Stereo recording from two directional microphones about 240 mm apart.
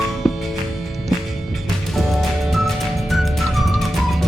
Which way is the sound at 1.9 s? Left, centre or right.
Centre.